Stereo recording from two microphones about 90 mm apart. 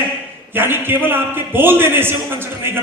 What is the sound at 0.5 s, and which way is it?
A man's voice, 25° right (ahead or behind).